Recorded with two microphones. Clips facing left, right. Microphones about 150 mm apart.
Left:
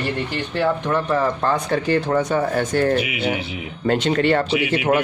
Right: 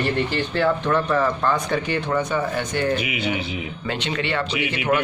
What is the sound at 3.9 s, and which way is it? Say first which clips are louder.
Speech: left 8 dB; 45° left (ahead or behind).